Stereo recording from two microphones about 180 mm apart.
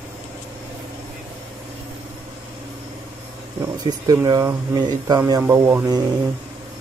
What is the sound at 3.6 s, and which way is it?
Speech, 20° right (ahead or behind).